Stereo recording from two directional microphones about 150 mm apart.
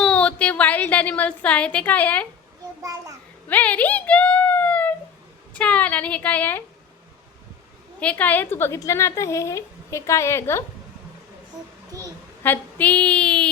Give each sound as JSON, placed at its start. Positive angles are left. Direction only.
{"t": 0.0, "sound": "a woman's voice", "side_deg": 5}
{"t": 2.8, "sound": "a child's voice", "side_deg": -20}
{"t": 3.5, "sound": "a woman's voice", "side_deg": 10}
{"t": 5.5, "sound": "female singing", "side_deg": 10}
{"t": 7.9, "sound": "a woman's voice", "side_deg": 10}
{"t": 12.4, "sound": "female singing", "side_deg": 15}